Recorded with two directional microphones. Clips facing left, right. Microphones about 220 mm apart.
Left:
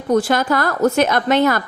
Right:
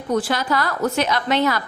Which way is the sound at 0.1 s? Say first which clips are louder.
Left 5 dB; 45° left (ahead or behind).